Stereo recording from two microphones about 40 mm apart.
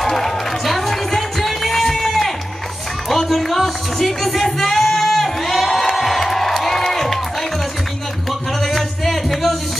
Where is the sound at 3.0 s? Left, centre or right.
Centre.